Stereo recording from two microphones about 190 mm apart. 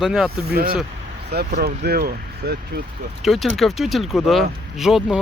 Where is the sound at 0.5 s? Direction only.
50° right (ahead or behind).